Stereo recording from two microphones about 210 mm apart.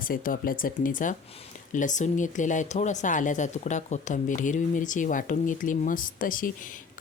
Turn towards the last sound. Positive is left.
turn(degrees=40)  # may be behind; listen again after turning